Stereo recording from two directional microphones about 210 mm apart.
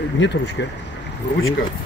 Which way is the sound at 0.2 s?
60° left (ahead or behind).